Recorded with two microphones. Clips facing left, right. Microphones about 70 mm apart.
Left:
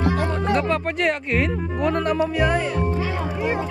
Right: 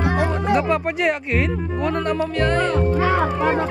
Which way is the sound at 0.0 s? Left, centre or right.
Centre.